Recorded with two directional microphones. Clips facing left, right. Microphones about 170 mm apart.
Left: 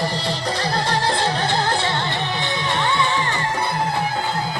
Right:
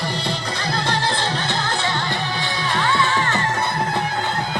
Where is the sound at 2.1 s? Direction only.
20° left (ahead or behind).